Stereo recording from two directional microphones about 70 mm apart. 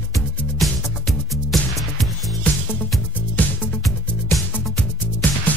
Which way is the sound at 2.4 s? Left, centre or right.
Left.